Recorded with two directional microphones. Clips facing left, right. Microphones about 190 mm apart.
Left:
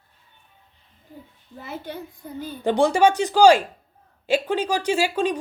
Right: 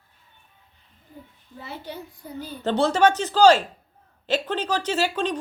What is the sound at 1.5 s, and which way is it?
A child's voice, 50° left (ahead or behind).